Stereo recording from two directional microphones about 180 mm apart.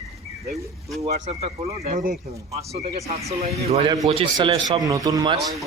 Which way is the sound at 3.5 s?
35° right (ahead or behind).